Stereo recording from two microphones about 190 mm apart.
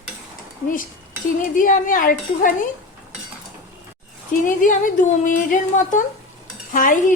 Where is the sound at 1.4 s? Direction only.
45° left (ahead or behind).